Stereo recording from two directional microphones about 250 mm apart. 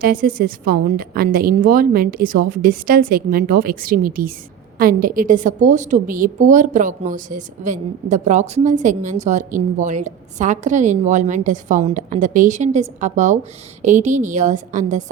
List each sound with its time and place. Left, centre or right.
0.0 s a woman's voice: right